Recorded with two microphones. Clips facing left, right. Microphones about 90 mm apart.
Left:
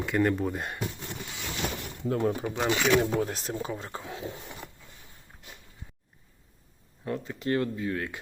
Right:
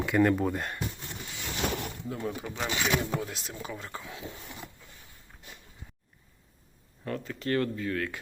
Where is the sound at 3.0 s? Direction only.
45° left (ahead or behind).